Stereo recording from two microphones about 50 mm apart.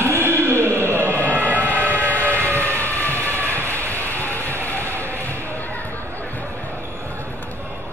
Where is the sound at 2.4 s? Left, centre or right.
Left.